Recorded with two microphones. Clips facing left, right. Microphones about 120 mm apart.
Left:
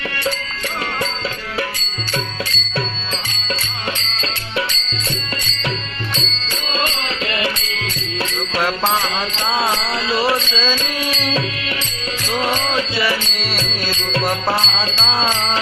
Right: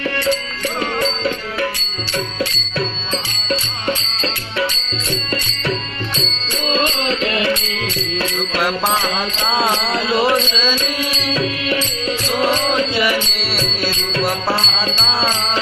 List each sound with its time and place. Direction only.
9.8 s mantra: 25° right (ahead or behind)